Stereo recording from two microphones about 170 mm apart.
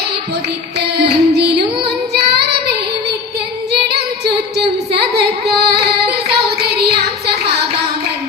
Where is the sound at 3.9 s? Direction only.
70° right (ahead or behind).